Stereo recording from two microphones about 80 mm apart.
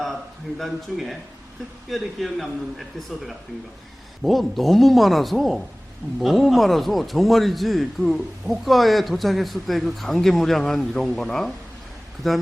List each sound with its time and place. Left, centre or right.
0.6 s a man's voice: centre